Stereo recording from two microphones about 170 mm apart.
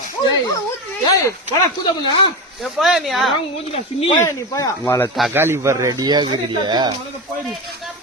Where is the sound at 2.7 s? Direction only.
Centre (ahead or behind).